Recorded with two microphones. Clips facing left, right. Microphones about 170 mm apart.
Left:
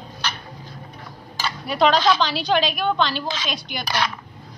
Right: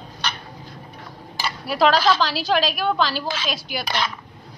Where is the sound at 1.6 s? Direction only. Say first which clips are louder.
Even; 5° right (ahead or behind).